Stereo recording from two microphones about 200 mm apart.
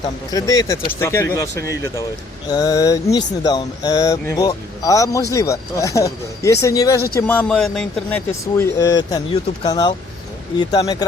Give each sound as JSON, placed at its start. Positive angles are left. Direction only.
{"t": 0.3, "sound": "speech", "side_deg": 15}